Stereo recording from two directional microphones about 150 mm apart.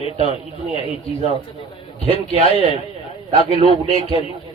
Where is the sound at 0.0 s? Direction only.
40° left (ahead or behind).